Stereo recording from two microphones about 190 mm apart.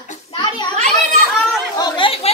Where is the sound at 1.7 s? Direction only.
25° left (ahead or behind).